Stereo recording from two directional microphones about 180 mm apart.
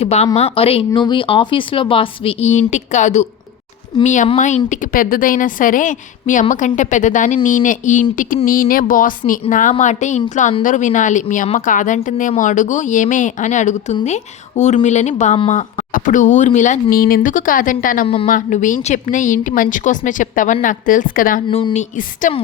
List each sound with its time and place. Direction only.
0.0 s a woman's voice: 35° left (ahead or behind)
21.5 s speech: 35° left (ahead or behind)